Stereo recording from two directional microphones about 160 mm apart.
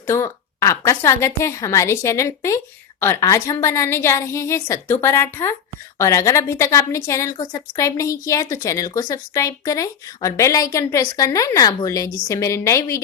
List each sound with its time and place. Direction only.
0.1 s a woman's voice: 20° left (ahead or behind)